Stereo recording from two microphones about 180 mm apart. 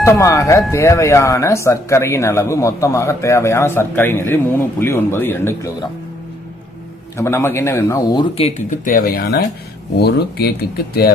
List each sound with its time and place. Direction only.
0.0 s speech: 15° left (ahead or behind)
7.2 s speech: 15° left (ahead or behind); by 11.1 s 60° left (ahead or behind)